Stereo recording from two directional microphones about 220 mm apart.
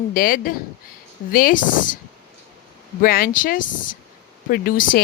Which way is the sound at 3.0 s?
40° left (ahead or behind).